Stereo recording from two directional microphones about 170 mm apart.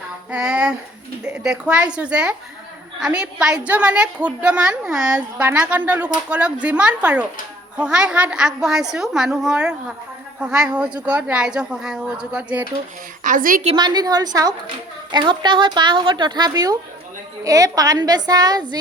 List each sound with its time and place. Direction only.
0.3 s a sound: 5° right (ahead or behind)
1.2 s a woman's voice: 5° right (ahead or behind)
13.2 s a woman's voice: 55° right (ahead or behind)
13.7 s a woman's voice: 25° right (ahead or behind)